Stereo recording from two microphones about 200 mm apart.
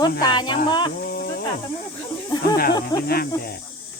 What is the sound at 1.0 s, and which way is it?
Cricket, 45° left (ahead or behind).